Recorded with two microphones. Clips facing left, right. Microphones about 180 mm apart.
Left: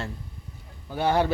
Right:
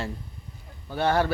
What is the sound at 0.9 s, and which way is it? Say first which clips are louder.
Speech: even; 10° left (ahead or behind).